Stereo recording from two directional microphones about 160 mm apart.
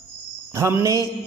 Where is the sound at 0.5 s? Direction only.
20° right (ahead or behind).